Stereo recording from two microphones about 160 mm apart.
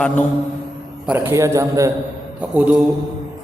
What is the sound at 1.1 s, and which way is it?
Speech, 15° right (ahead or behind).